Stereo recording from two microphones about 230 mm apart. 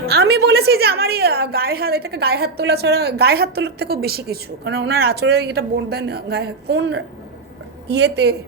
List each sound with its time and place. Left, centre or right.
0.0 s a woman's voice: right